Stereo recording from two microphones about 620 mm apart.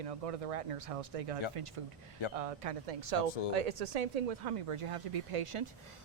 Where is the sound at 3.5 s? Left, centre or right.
Right.